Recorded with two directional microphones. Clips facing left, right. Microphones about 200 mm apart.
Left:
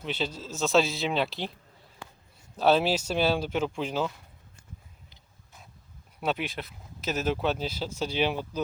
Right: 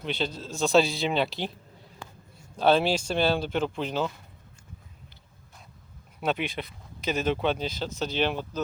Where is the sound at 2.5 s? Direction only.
5° left (ahead or behind).